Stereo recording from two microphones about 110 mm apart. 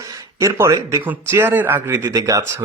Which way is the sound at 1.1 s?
20° right (ahead or behind).